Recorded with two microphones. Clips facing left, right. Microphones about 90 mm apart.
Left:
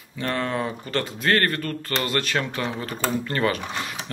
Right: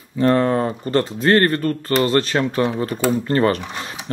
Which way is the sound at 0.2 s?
35° right (ahead or behind).